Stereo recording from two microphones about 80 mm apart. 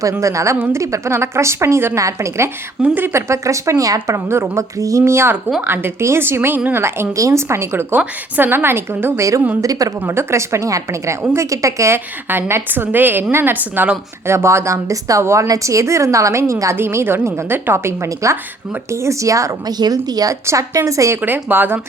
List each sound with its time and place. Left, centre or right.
0.2 s a woman's voice: right
2.8 s a woman's voice: right
10.0 s a woman's voice: right
12.3 s a woman's voice: right
19.8 s a woman's voice: right
21.2 s a woman's voice: right